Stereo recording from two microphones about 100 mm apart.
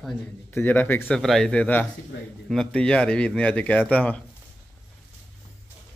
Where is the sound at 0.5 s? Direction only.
20° left (ahead or behind).